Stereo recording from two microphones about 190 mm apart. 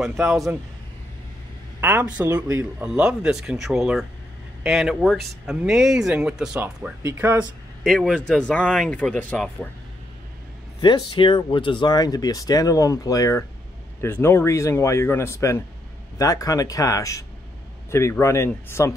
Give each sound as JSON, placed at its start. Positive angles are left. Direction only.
{"t": 0.2, "sound": "speech", "side_deg": -5}
{"t": 1.8, "sound": "speech", "side_deg": -10}
{"t": 7.8, "sound": "speech", "side_deg": 5}
{"t": 10.8, "sound": "speech", "side_deg": 25}